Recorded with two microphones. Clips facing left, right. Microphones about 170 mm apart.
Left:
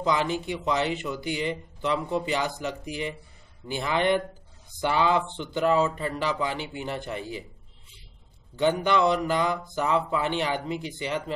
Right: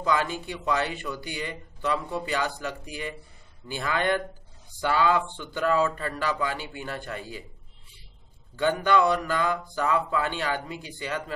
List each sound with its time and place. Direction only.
0.0 s speech: 20° left (ahead or behind)
8.5 s speech: 20° left (ahead or behind)